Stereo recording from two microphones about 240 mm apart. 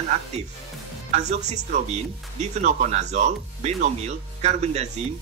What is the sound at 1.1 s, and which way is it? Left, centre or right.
Speech, right.